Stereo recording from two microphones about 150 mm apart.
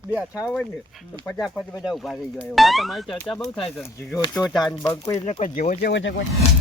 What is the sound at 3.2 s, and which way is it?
Speech, 15° left (ahead or behind).